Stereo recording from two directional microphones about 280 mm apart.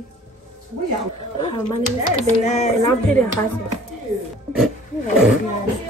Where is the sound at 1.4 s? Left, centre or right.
Centre.